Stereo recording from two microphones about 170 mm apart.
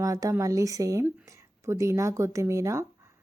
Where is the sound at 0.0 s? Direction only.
20° right (ahead or behind).